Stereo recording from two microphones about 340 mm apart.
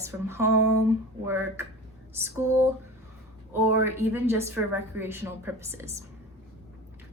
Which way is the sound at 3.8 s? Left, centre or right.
Centre.